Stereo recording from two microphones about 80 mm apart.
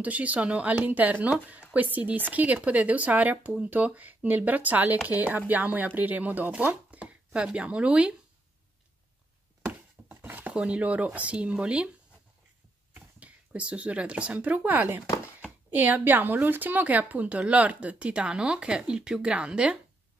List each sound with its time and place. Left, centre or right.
0.0 s speech: centre
9.7 s a sound: right
10.5 s a woman's voice: centre
12.9 s a woman's voice: centre